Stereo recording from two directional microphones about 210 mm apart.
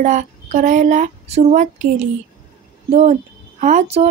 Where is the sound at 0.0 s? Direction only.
35° right (ahead or behind).